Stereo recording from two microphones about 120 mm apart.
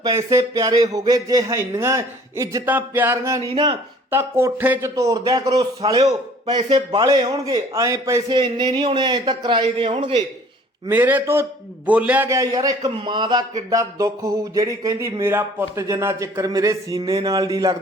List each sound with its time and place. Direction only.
0.0 s speech: 30° right (ahead or behind)
2.6 s a sound: 15° right (ahead or behind)
3.5 s a man's voice: 40° right (ahead or behind)
4.1 s speech: 20° right (ahead or behind)
8.3 s a man's voice: 40° right (ahead or behind)
10.8 s a sound: 15° right (ahead or behind)
12.3 s a man's voice: 30° right (ahead or behind)
13.7 s a man's voice: 30° right (ahead or behind)